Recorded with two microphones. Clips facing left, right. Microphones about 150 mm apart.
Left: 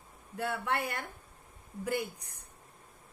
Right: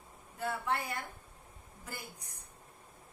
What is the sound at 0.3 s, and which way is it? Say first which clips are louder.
A woman's voice: left 2 dB; 65° left (ahead or behind).